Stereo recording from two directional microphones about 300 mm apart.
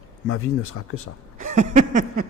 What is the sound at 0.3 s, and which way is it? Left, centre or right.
Speech, left.